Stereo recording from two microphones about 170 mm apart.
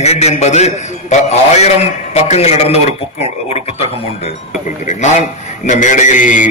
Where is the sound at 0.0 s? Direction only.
40° left (ahead or behind).